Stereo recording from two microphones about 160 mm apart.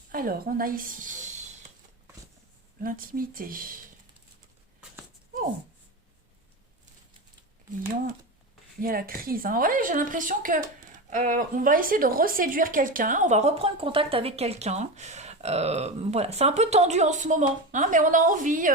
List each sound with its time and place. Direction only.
0.1 s a woman's voice: 60° right (ahead or behind)
2.8 s speech: 60° right (ahead or behind)
8.8 s a woman's voice: 65° right (ahead or behind)